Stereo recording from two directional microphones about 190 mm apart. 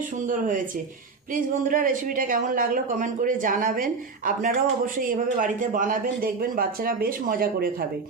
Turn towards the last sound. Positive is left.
turn(degrees=-50)  # may be behind; listen again after turning